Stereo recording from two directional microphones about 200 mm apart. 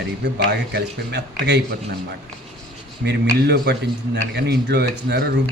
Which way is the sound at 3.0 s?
55° right (ahead or behind).